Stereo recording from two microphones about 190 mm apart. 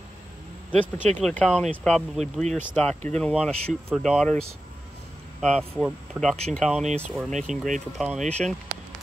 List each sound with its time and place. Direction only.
0.7 s speech: 10° left (ahead or behind)
5.4 s speech: 5° left (ahead or behind)
7.3 s speech: 40° right (ahead or behind)
8.0 s speech: centre (ahead or behind)